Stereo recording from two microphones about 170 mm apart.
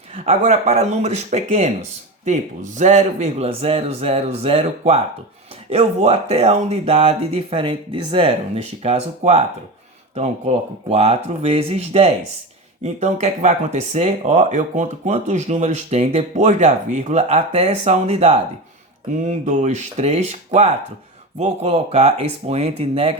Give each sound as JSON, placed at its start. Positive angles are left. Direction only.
{"t": 0.1, "sound": "speech", "side_deg": -40}